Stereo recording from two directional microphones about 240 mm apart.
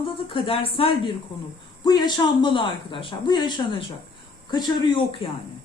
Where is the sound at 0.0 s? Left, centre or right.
Left.